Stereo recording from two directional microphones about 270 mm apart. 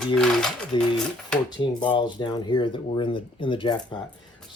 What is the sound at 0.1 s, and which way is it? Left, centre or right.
Speech, centre.